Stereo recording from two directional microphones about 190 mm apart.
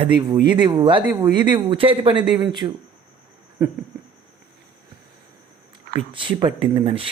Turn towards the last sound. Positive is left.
turn(degrees=-30)  # may be behind; listen again after turning